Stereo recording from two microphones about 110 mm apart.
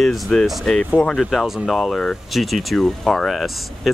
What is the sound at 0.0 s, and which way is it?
Speech, centre (ahead or behind).